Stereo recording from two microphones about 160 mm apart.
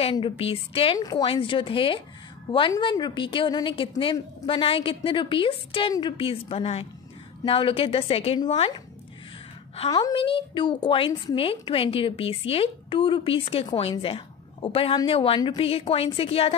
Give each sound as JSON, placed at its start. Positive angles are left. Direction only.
{"t": 0.0, "sound": "a woman's voice", "side_deg": 35}
{"t": 0.9, "sound": "a woman's voice", "side_deg": 25}
{"t": 9.8, "sound": "a woman's voice", "side_deg": 25}